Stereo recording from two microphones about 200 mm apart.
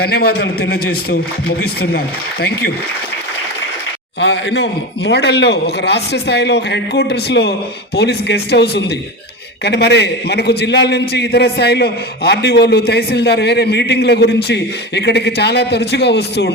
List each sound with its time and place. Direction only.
0.0 s a man's voice: 50° left (ahead or behind)
4.2 s a man's voice: 60° left (ahead or behind)